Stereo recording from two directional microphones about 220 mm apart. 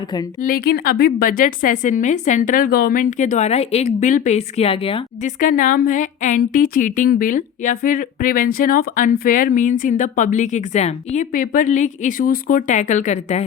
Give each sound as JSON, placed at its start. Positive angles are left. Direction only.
{"t": 0.4, "sound": "a woman's voice", "side_deg": 40}
{"t": 5.4, "sound": "a woman's voice", "side_deg": 40}